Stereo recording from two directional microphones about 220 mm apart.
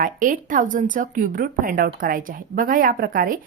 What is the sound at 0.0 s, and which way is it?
A woman's voice, 35° right (ahead or behind).